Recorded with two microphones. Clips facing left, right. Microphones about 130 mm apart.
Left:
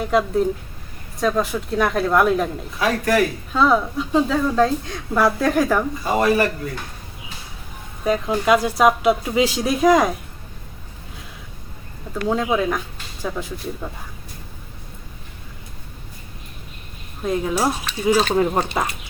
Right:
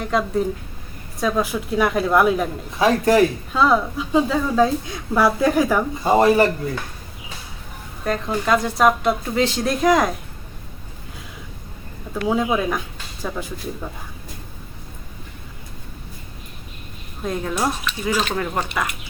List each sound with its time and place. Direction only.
0.0 s a woman's voice: 5° left (ahead or behind)
2.7 s speech: 25° right (ahead or behind)
3.5 s a woman's voice: centre (ahead or behind)
6.0 s speech: 30° right (ahead or behind)
8.0 s speech: 10° left (ahead or behind)
12.1 s a woman's voice: 5° right (ahead or behind)
17.2 s a woman's voice: 5° left (ahead or behind)
18.1 s speech: 35° left (ahead or behind)
18.3 s speech: 25° left (ahead or behind)